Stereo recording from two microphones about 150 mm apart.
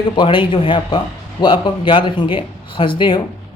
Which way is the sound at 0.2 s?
30° left (ahead or behind).